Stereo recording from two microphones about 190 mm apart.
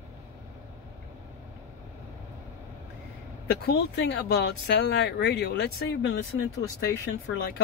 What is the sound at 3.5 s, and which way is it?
Speech, 60° left (ahead or behind).